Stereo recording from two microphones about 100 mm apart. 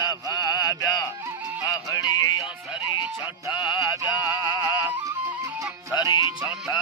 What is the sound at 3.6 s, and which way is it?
Mantra, 50° left (ahead or behind).